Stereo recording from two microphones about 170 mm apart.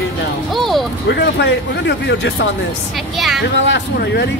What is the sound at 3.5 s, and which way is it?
Speech, 90° left.